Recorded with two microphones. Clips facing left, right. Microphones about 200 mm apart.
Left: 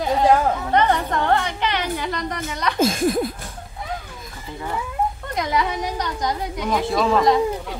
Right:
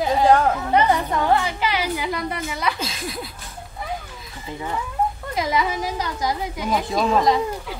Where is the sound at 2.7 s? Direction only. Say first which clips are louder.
Left 11 dB; 50° left (ahead or behind).